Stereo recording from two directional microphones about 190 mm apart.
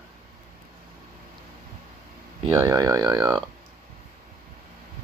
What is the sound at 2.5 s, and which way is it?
Speech, 15° right (ahead or behind).